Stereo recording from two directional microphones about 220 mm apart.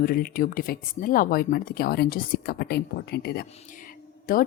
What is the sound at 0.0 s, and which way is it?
A woman's voice, 40° left (ahead or behind).